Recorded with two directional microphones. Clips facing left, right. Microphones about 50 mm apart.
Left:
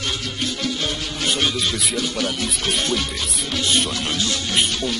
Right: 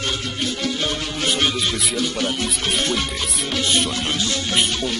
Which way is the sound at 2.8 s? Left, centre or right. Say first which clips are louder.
Right 1 dB; right.